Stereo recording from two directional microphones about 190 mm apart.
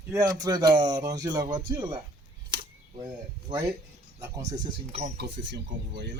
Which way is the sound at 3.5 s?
25° right (ahead or behind).